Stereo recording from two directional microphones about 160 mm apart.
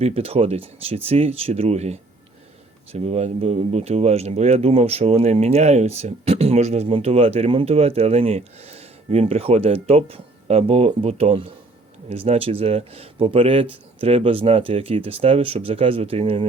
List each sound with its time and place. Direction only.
0.0 s speech: 40° right (ahead or behind)